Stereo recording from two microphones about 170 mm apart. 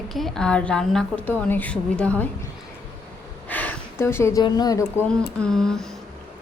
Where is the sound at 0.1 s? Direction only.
Centre (ahead or behind).